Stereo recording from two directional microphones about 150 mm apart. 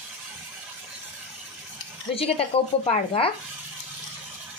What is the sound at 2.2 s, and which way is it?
A woman's voice, 45° left (ahead or behind).